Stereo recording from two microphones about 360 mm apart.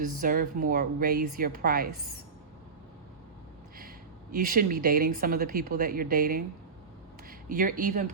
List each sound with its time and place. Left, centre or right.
0.0 s speech: right
3.8 s speech: right